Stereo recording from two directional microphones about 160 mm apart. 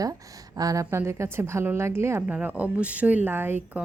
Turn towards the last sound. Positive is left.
turn(degrees=-10)  # may be behind; listen again after turning